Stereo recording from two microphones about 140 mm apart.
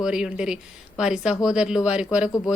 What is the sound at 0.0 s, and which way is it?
Speech, 5° right (ahead or behind).